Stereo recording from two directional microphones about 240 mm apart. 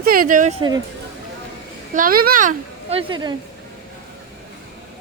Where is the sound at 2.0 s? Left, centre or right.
Right; by 3.3 s centre.